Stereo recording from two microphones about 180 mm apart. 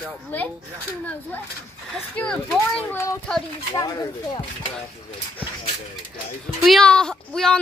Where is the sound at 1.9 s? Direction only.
5° left (ahead or behind).